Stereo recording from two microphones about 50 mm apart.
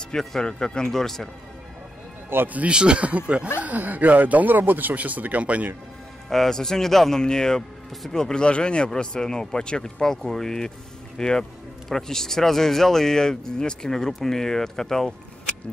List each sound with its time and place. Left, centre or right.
0.1 s speech: centre
2.2 s speech: right
2.7 s speech: centre
6.3 s speech: centre